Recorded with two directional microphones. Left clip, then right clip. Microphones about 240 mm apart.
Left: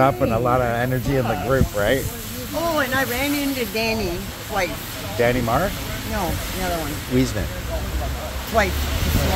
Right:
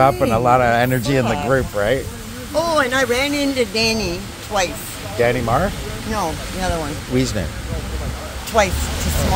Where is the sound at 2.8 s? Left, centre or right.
Right.